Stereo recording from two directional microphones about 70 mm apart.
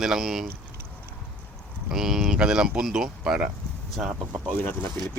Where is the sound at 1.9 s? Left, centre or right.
Centre.